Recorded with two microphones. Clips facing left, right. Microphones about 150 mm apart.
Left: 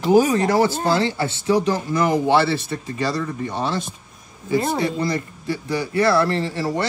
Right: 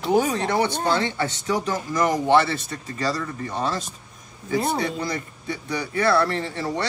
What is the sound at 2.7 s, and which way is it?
Speech, 25° left (ahead or behind).